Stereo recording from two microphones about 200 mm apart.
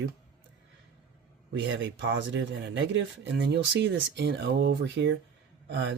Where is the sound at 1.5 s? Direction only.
65° right (ahead or behind).